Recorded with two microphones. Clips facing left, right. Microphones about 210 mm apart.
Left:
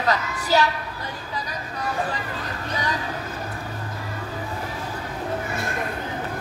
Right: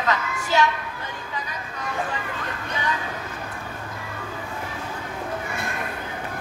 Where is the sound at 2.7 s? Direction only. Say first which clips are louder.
Left 1 dB; 35° left (ahead or behind).